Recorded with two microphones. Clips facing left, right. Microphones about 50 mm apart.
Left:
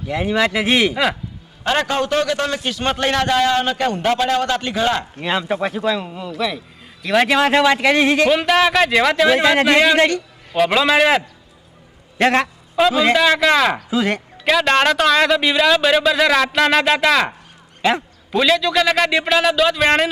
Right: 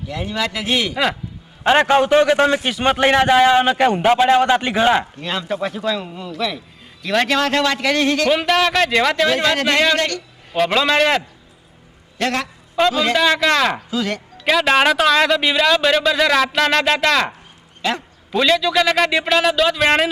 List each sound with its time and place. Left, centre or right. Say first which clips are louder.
0.1 s speech: left 6 dB; left
1.6 s a man's voice: right 5 dB; right
5.2 s speech: left 3 dB; centre
8.3 s a man's voice: left 1 dB; centre
10.5 s a man's voice: left 1 dB; centre
12.1 s a man's voice: left 5 dB; left
12.8 s a man's voice: left 2 dB; centre
13.9 s speech: left 3 dB; left
14.4 s a man's voice: even; centre